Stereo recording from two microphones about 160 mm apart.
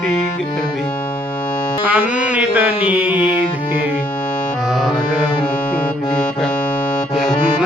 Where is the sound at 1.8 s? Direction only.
5° right (ahead or behind).